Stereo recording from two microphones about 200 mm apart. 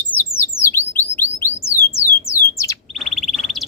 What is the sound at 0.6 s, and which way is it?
Bird, 10° left (ahead or behind).